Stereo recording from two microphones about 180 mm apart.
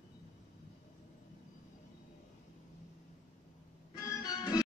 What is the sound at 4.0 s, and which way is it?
Music, 20° left (ahead or behind).